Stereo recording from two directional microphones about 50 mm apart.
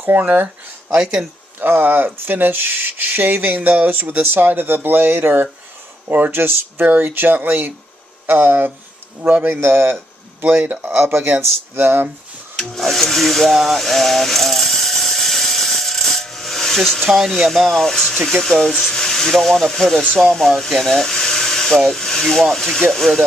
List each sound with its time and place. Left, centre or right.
0.0 s speech: right
1.5 s speech: right
9.2 s a man's voice: right
9.5 s speech: right
10.4 s speech: right
11.0 s speech: right
12.5 s a sound: centre
17.2 s speech: centre